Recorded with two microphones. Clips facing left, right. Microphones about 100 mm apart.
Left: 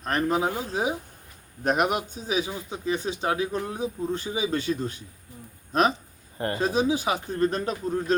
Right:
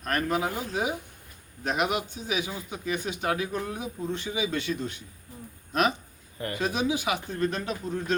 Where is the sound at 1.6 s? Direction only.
50° left (ahead or behind).